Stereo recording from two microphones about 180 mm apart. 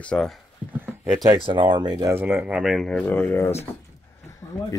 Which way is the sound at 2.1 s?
5° right (ahead or behind).